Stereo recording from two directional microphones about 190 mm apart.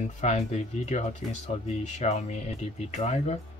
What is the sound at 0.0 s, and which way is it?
Speech, 35° left (ahead or behind).